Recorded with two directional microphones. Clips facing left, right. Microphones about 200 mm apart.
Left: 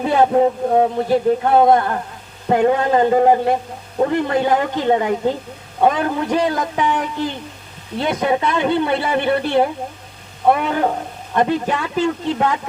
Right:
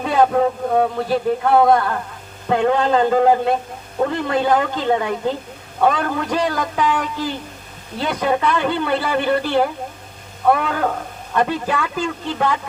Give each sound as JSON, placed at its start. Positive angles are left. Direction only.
{"t": 0.0, "sound": "speech", "side_deg": 25}